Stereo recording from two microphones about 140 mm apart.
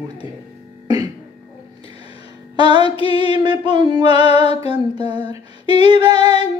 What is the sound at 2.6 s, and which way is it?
Female singing, 30° right (ahead or behind).